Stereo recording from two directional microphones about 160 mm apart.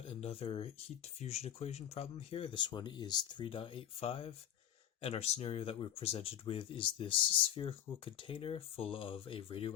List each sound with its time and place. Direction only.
0.1 s speech: 35° left (ahead or behind)